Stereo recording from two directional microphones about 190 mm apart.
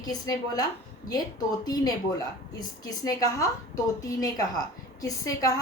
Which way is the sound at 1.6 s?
20° left (ahead or behind).